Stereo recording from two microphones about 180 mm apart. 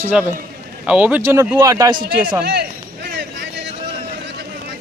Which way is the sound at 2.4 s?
65° right (ahead or behind).